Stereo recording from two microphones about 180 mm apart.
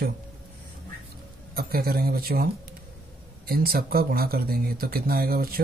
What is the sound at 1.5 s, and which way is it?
Speech, 55° right (ahead or behind).